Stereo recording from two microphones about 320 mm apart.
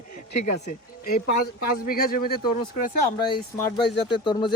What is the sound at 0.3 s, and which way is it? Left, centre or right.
A man's voice, left.